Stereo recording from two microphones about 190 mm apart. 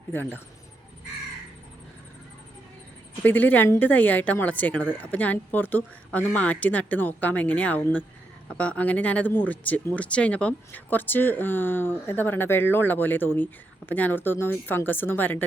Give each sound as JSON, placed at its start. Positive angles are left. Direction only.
{"t": 0.1, "sound": "speech", "side_deg": 10}
{"t": 3.2, "sound": "speech", "side_deg": 10}